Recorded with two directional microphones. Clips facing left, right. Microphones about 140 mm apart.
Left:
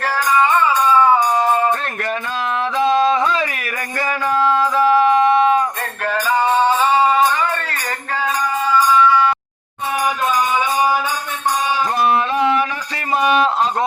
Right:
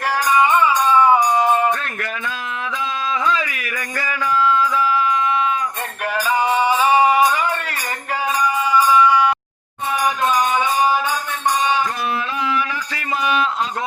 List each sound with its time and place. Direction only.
0.3 s music: 15° right (ahead or behind)
2.7 s music: 40° left (ahead or behind)
4.0 s a sound: 45° left (ahead or behind)
6.3 s music: 15° right (ahead or behind)